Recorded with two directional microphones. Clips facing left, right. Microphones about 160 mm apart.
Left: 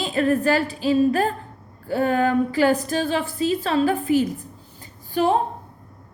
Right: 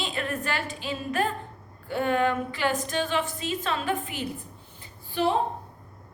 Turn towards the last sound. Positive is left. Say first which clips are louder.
# left 5 dB
turn(degrees=40)  # may be behind; listen again after turning